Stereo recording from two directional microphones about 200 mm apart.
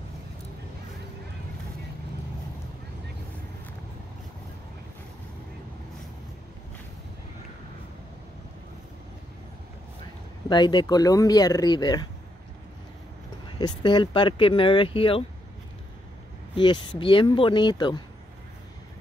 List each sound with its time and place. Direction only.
10.5 s speech: 20° left (ahead or behind)
13.5 s speech: 25° left (ahead or behind)
16.5 s speech: 25° left (ahead or behind)